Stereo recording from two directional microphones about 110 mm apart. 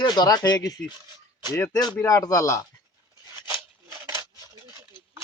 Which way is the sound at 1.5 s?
25° left (ahead or behind).